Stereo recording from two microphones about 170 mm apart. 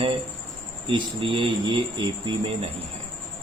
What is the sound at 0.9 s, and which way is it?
Speech, 30° right (ahead or behind).